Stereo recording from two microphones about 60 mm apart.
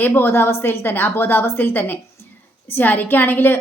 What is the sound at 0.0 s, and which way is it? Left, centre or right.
Speech, left.